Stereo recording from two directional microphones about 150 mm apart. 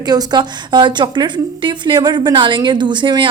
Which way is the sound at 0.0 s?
25° right (ahead or behind).